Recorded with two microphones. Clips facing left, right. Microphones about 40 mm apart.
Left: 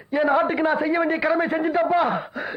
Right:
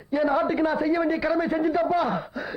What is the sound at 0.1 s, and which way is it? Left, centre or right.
A man's voice, left.